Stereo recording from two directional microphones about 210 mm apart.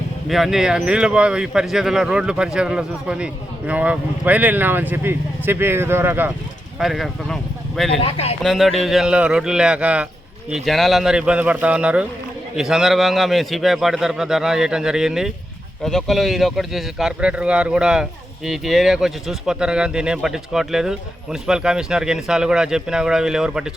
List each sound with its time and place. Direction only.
0.3 s speech: centre (ahead or behind)
7.9 s speech: 25° left (ahead or behind)
8.4 s speech: centre (ahead or behind)